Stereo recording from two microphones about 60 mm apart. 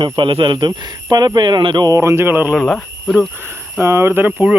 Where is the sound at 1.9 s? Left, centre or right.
Right.